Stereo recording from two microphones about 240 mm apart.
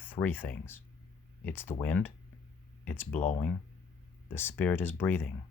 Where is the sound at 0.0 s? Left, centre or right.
Centre.